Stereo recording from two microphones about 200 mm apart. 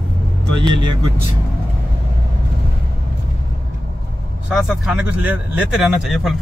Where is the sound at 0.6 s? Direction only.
25° right (ahead or behind).